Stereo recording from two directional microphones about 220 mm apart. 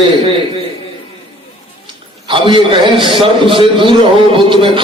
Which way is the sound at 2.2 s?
20° right (ahead or behind).